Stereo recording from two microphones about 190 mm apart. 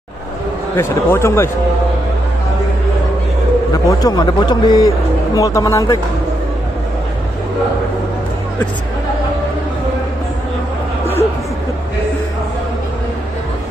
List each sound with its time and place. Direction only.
0.7 s speech: 15° left (ahead or behind)
3.7 s a man's voice: 20° left (ahead or behind)